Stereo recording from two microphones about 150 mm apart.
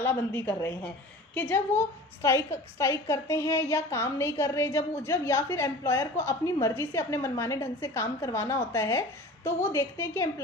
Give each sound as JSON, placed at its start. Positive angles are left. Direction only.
{"t": 0.0, "sound": "a woman's voice", "side_deg": 15}